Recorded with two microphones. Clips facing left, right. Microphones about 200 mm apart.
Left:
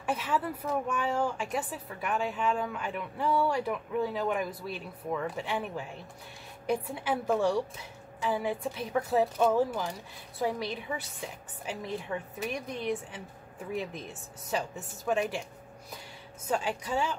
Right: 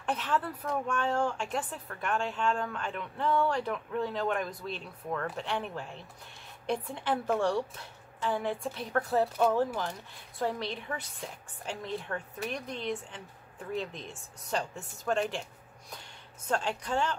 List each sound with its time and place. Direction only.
0.0 s a woman's voice: 5° left (ahead or behind)
16.4 s speech: 5° left (ahead or behind)